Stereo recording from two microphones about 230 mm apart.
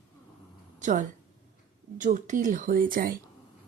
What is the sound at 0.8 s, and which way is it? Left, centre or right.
A woman's voice, right.